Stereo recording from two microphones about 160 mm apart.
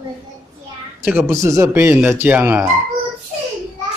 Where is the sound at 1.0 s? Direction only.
15° right (ahead or behind).